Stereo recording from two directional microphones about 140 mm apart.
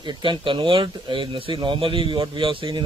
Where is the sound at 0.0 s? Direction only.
35° right (ahead or behind).